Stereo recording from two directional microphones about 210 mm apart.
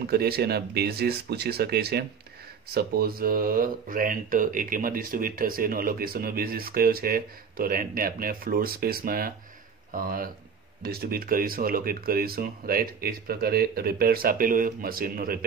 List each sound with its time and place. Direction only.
0.0 s speech: 50° right (ahead or behind)